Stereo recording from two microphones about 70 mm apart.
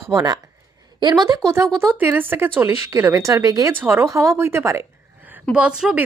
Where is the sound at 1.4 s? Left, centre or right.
Right.